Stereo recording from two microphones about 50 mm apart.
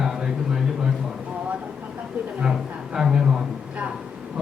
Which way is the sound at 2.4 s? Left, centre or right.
Centre.